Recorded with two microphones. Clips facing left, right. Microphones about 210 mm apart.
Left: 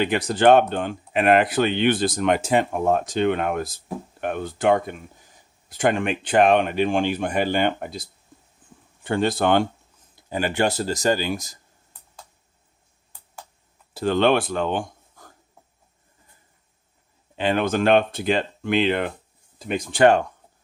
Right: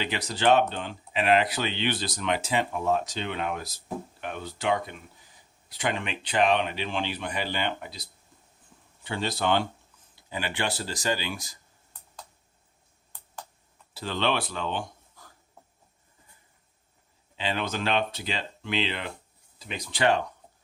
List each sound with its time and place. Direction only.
0.0 s speech: 50° left (ahead or behind)
13.9 s speech: 50° left (ahead or behind)
17.3 s speech: 50° left (ahead or behind)